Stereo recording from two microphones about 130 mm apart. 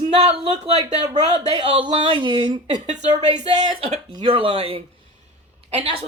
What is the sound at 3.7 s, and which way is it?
A woman's voice, 45° right (ahead or behind).